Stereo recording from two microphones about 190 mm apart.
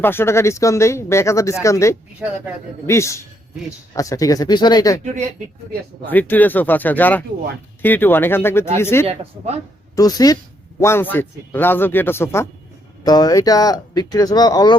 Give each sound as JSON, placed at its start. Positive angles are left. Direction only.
{"t": 0.0, "sound": "speech", "side_deg": 10}
{"t": 5.0, "sound": "speech", "side_deg": -40}
{"t": 6.1, "sound": "speech", "side_deg": 10}